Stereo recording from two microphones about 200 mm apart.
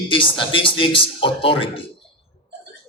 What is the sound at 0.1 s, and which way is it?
A man's voice, 25° left (ahead or behind).